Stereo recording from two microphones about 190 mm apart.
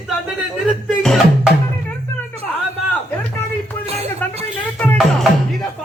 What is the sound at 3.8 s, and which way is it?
Music, 35° right (ahead or behind).